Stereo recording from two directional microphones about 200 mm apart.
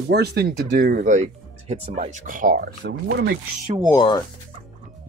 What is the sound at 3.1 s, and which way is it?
Speech, 60° right (ahead or behind).